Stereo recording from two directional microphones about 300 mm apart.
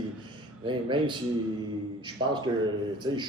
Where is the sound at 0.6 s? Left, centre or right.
Centre.